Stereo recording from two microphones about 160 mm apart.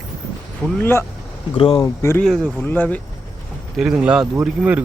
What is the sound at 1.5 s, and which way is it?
Speech, 35° left (ahead or behind).